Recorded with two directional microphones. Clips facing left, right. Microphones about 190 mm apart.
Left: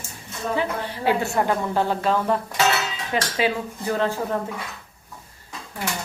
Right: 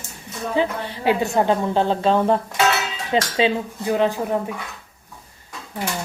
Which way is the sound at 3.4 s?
15° right (ahead or behind).